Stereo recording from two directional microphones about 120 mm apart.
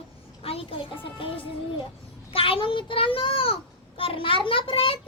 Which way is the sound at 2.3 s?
50° left (ahead or behind).